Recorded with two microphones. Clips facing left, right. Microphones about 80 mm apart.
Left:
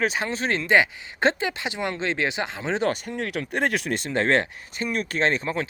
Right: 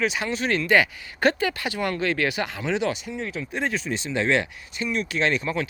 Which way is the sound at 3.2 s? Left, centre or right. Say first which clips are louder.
Left 3 dB; left.